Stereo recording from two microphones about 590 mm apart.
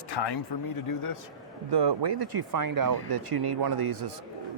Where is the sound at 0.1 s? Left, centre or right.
Left.